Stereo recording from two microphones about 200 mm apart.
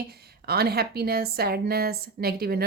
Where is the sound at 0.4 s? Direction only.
50° right (ahead or behind).